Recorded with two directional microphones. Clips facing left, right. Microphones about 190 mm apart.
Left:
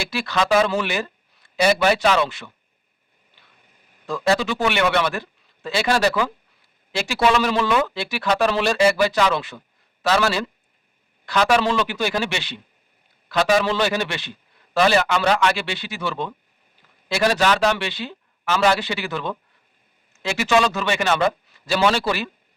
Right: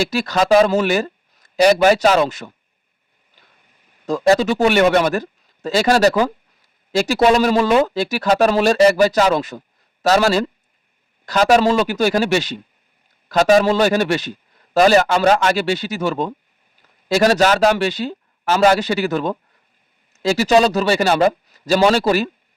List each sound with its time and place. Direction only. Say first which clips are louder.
0.0 s speech: right 5 dB; 40° right (ahead or behind)
4.0 s a man's voice: right 6 dB; 40° right (ahead or behind)